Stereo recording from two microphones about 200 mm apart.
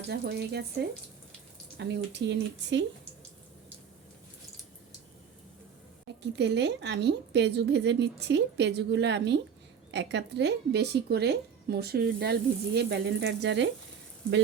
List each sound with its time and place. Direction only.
0.1 s speech: 55° right (ahead or behind)
6.3 s speech: 60° right (ahead or behind)